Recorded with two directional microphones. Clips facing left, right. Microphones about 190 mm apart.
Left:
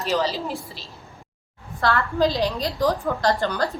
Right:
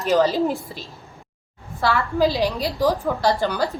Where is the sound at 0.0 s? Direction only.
50° right (ahead or behind).